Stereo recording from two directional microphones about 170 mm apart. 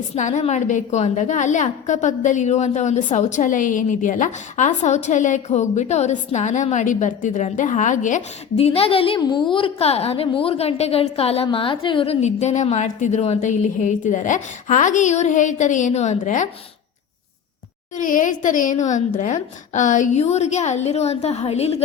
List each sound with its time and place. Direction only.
0.2 s a woman's voice: 45° left (ahead or behind)
17.9 s a woman's voice: 50° left (ahead or behind)